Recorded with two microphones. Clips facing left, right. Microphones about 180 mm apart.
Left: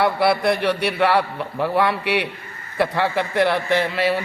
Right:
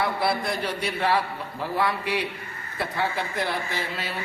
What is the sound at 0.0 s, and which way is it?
Speech, 70° left (ahead or behind).